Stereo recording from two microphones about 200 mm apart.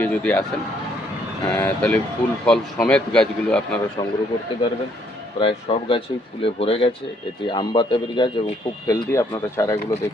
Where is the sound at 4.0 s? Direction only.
20° left (ahead or behind).